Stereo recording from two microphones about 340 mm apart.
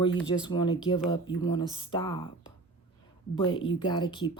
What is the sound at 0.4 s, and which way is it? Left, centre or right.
Speech, centre.